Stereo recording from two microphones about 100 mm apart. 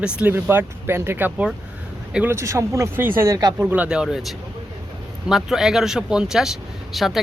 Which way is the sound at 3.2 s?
40° right (ahead or behind).